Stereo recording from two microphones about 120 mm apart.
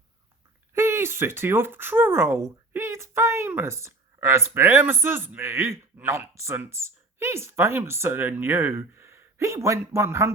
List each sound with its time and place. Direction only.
0.7 s speech: 20° right (ahead or behind)